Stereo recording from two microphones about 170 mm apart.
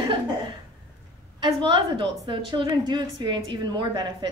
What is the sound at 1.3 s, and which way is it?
A woman's voice, 30° right (ahead or behind).